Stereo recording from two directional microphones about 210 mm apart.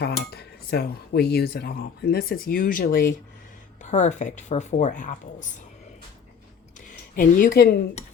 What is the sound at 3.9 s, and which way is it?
Speech, 35° left (ahead or behind).